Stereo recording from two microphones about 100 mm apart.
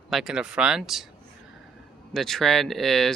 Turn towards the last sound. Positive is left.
turn(degrees=0)  # may be behind; listen again after turning